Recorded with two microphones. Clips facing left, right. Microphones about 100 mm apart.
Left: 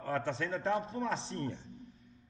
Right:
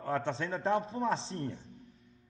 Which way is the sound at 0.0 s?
30° right (ahead or behind).